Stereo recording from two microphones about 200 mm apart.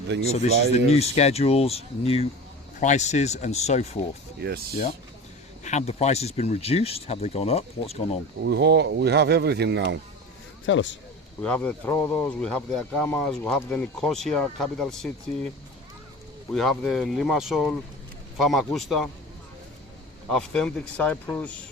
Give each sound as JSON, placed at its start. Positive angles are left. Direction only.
{"t": 0.3, "sound": "speech", "side_deg": 30}
{"t": 4.4, "sound": "speech", "side_deg": -55}
{"t": 5.6, "sound": "speech", "side_deg": 35}
{"t": 8.4, "sound": "speech", "side_deg": -55}
{"t": 10.7, "sound": "speech", "side_deg": 70}
{"t": 11.4, "sound": "speech", "side_deg": 5}
{"t": 16.5, "sound": "speech", "side_deg": 0}
{"t": 20.3, "sound": "speech", "side_deg": 5}